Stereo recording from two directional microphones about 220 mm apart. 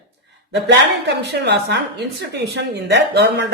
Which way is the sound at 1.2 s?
50° right (ahead or behind).